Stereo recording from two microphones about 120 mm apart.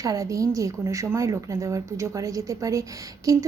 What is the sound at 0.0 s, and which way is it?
Speech, 30° right (ahead or behind).